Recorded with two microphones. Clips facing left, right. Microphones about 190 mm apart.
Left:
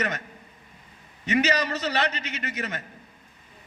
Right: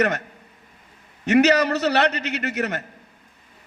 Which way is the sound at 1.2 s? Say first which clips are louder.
Right 7 dB; 70° right (ahead or behind).